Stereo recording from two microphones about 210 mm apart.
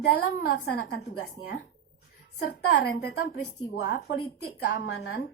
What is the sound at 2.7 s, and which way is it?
Speech, 45° left (ahead or behind).